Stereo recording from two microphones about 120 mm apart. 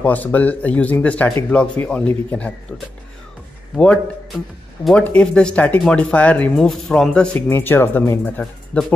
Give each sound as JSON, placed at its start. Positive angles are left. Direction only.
{"t": 0.0, "sound": "speech", "side_deg": 15}
{"t": 3.7, "sound": "speech", "side_deg": 5}
{"t": 7.4, "sound": "speech", "side_deg": 20}